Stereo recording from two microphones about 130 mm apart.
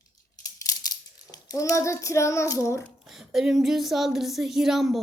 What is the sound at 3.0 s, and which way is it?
Child singing, 5° right (ahead or behind).